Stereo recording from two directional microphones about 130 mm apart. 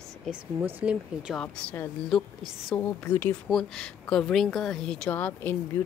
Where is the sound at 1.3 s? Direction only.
10° left (ahead or behind).